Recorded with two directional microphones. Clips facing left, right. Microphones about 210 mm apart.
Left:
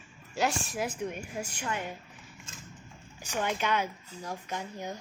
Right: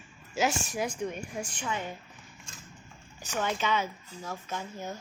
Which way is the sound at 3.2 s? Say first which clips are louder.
Even; 10° left (ahead or behind).